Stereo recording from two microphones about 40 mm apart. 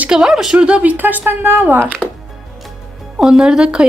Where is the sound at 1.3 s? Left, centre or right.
Right.